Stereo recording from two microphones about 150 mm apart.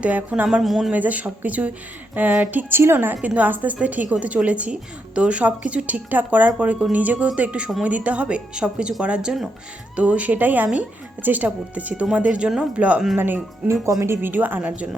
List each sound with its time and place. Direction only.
0.0 s a woman's voice: 10° right (ahead or behind)